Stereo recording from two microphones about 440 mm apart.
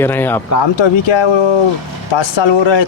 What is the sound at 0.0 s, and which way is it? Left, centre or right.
Speech, centre.